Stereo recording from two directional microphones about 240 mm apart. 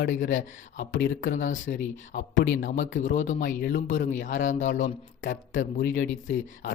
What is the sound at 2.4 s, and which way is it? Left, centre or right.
Speech, left.